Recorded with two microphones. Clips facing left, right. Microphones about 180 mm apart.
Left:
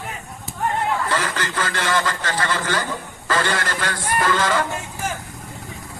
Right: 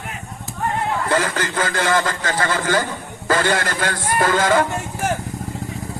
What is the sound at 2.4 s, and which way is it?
A man's voice, 50° right (ahead or behind).